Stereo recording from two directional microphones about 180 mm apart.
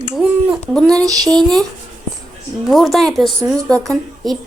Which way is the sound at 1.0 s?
20° right (ahead or behind).